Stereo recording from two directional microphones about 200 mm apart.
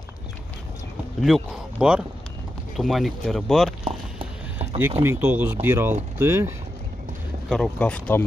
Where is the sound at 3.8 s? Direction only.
30° right (ahead or behind).